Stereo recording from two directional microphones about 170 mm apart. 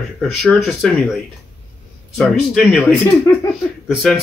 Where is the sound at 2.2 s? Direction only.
Centre (ahead or behind).